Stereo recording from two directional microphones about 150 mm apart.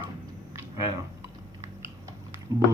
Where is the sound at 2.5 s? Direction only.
25° right (ahead or behind).